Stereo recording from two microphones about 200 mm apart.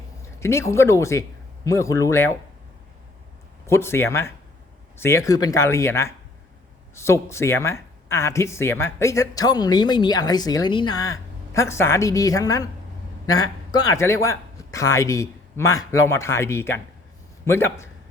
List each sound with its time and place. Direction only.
0.3 s speech: 15° left (ahead or behind)
3.7 s a man's voice: 10° left (ahead or behind)